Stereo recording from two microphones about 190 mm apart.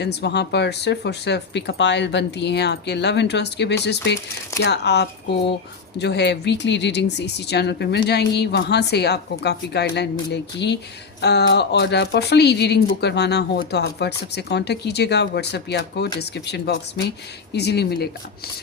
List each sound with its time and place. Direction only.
0.0 s speech: 60° left (ahead or behind)